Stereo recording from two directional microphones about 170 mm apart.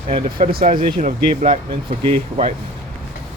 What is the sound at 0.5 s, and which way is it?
Speech, 55° right (ahead or behind).